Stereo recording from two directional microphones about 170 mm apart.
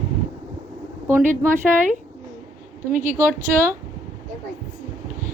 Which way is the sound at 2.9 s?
50° right (ahead or behind).